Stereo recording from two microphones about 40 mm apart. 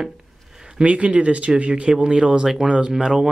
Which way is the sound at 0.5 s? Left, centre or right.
Centre.